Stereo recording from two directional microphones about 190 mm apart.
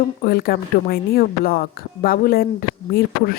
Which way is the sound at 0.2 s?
55° left (ahead or behind).